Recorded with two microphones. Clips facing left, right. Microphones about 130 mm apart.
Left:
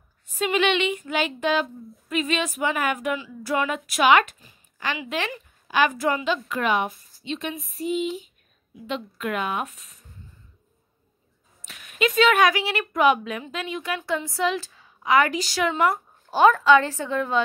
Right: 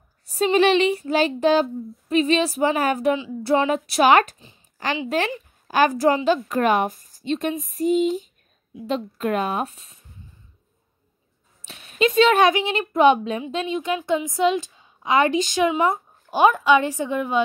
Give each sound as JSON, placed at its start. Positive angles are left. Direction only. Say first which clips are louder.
{"t": 0.3, "sound": "speech", "louder": "right 5 dB", "side_deg": -35}
{"t": 11.6, "sound": "a woman's voice", "louder": "right 4 dB", "side_deg": -30}